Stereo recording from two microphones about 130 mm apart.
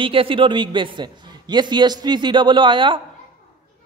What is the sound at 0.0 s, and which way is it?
Speech, 45° right (ahead or behind).